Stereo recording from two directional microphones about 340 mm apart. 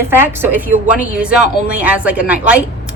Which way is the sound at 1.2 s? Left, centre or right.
Centre.